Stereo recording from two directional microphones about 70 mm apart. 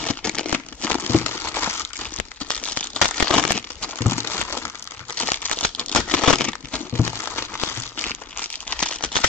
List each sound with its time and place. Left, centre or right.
0.0 s a sound: centre
0.8 s crumpling: left
2.5 s crumpling: centre
4.1 s crumpling: left
5.1 s crumpling: left
7.0 s crumpling: left
8.0 s crumpling: centre